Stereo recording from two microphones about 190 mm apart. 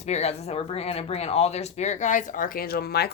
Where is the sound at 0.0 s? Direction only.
35° left (ahead or behind).